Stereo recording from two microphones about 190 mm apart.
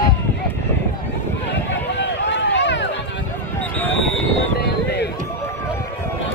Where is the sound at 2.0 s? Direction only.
65° left (ahead or behind).